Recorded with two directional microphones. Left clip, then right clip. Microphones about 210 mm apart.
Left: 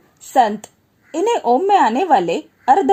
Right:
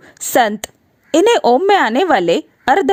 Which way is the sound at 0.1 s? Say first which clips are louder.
Right 1 dB; 45° right (ahead or behind).